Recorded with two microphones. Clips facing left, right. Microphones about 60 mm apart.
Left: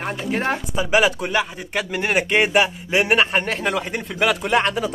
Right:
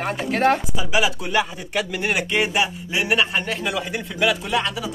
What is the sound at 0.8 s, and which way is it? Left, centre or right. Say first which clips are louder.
Speech: left 4 dB; left.